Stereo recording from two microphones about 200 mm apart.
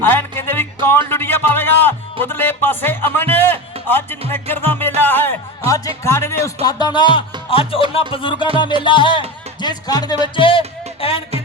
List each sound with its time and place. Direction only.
0.0 s music: 10° left (ahead or behind)
0.9 s speech: 10° left (ahead or behind); by 11.2 s 25° left (ahead or behind)